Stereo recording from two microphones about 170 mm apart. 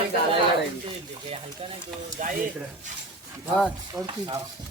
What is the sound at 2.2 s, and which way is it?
Speech, 45° right (ahead or behind).